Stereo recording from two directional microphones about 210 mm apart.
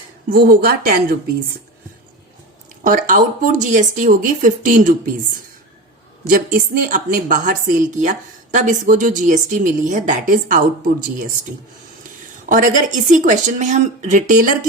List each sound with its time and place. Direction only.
0.3 s speech: 45° right (ahead or behind)
2.8 s a woman's voice: 40° right (ahead or behind)
6.2 s a woman's voice: 40° right (ahead or behind)
12.5 s a woman's voice: 40° right (ahead or behind)